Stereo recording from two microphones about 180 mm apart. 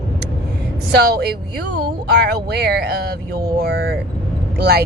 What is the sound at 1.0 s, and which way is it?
Speech, 60° right (ahead or behind).